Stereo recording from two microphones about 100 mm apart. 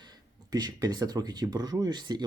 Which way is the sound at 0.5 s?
40° right (ahead or behind).